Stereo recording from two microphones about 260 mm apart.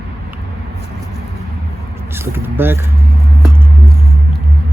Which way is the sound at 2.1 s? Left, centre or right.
Centre.